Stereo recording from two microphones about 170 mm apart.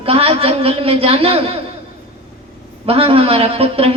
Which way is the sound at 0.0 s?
35° right (ahead or behind).